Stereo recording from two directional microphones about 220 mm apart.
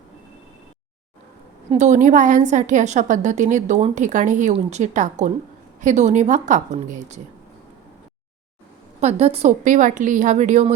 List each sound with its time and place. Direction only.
1.7 s a woman's voice: 30° right (ahead or behind)
9.0 s a woman's voice: 30° right (ahead or behind)